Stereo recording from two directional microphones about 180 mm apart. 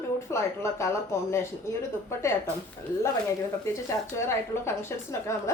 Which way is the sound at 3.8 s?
15° left (ahead or behind).